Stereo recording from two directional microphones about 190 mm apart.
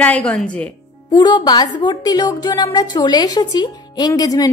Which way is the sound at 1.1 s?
20° left (ahead or behind).